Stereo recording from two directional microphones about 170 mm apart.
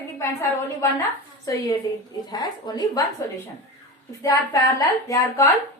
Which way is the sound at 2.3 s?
25° left (ahead or behind).